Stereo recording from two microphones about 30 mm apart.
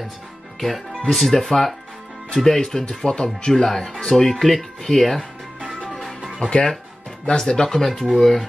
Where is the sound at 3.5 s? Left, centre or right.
Centre.